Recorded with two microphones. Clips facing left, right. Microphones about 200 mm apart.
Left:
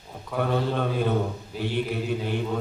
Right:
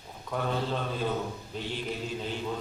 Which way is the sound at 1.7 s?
60° left (ahead or behind).